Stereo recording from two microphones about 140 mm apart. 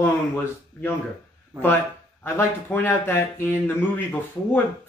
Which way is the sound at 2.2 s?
15° left (ahead or behind).